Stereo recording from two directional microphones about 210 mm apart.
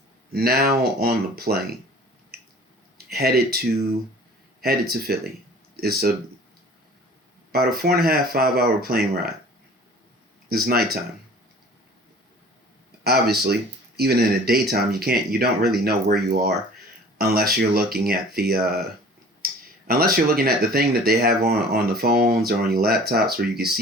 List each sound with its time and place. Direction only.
0.3 s speech: 50° right (ahead or behind)
3.1 s speech: 50° right (ahead or behind)
7.5 s speech: 45° right (ahead or behind)
10.5 s speech: 45° right (ahead or behind)
13.1 s speech: 50° right (ahead or behind)
19.4 s clicking: 45° right (ahead or behind)
19.9 s speech: 45° right (ahead or behind)